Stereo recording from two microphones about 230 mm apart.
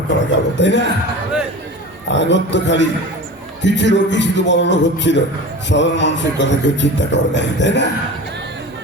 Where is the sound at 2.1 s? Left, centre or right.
Left.